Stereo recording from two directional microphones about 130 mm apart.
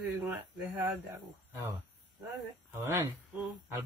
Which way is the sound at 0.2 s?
10° right (ahead or behind).